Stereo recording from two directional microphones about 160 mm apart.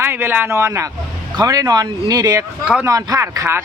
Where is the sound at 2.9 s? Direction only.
20° right (ahead or behind).